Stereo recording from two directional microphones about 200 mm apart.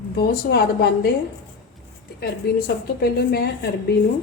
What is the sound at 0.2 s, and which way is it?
Speech, 55° left (ahead or behind).